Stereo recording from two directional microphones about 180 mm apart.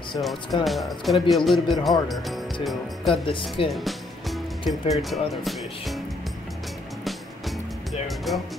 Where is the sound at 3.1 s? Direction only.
30° left (ahead or behind).